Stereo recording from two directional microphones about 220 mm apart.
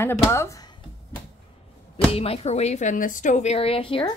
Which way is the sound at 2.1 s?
25° left (ahead or behind).